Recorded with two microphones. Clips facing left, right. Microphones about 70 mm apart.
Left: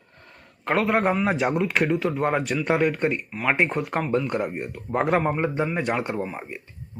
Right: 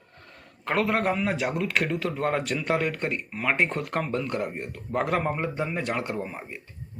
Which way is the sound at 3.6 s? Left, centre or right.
Centre.